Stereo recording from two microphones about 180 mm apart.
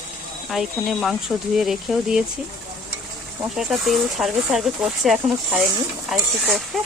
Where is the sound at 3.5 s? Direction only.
Centre (ahead or behind).